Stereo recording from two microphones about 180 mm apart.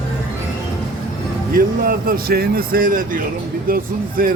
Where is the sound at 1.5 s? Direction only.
55° right (ahead or behind).